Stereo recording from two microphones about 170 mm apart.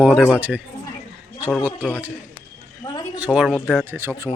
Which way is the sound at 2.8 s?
30° left (ahead or behind).